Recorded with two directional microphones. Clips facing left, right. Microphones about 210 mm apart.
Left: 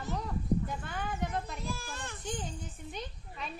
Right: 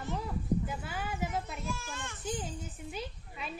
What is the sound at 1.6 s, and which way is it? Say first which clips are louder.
Speech: even; 35° left (ahead or behind).